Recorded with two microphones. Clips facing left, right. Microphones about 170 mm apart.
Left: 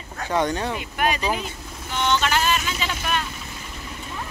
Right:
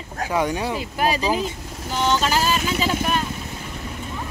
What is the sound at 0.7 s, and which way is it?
Speech, 35° right (ahead or behind).